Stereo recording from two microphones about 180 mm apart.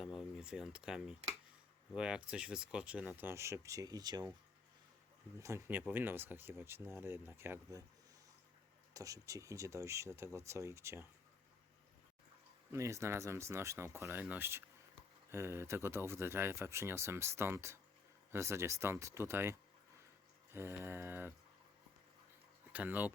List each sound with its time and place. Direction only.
0.2 s speech: 5° right (ahead or behind); by 4.3 s 20° right (ahead or behind)
5.4 s speech: 15° right (ahead or behind)
8.9 s speech: 20° right (ahead or behind)
12.7 s speech: 15° right (ahead or behind)
22.7 s speech: 10° right (ahead or behind)